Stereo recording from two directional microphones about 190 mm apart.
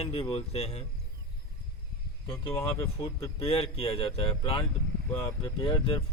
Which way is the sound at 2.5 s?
10° left (ahead or behind).